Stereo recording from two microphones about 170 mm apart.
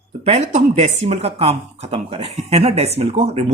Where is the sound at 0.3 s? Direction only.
40° right (ahead or behind).